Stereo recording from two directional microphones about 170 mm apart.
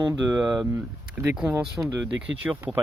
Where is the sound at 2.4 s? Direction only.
5° right (ahead or behind).